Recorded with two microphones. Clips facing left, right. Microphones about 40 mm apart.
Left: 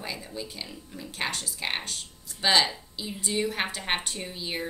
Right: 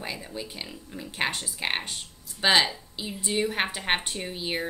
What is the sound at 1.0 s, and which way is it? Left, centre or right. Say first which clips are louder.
A woman's voice: right 3 dB; right.